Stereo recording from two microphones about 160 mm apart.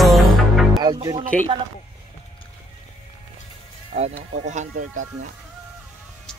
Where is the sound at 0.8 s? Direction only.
25° right (ahead or behind).